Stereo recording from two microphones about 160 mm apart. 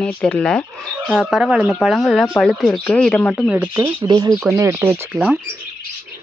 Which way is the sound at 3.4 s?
10° right (ahead or behind).